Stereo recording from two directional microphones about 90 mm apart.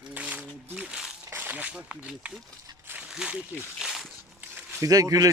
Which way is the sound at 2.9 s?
15° right (ahead or behind).